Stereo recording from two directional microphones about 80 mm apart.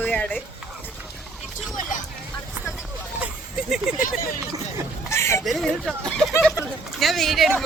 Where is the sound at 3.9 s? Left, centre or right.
Centre.